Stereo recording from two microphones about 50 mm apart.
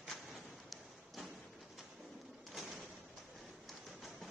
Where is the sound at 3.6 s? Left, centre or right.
Centre.